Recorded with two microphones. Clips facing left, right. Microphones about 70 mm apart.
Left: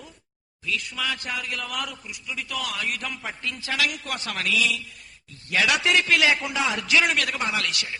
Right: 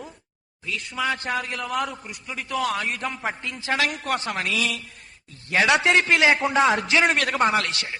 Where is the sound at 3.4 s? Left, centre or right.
Right.